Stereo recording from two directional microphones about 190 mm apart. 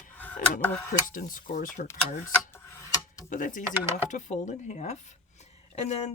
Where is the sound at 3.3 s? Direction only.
45° left (ahead or behind).